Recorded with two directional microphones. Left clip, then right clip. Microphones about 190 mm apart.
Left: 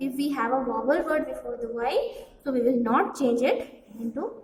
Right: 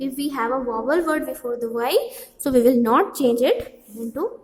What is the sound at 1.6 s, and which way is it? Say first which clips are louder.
A woman's voice: right 5 dB; 65° right (ahead or behind).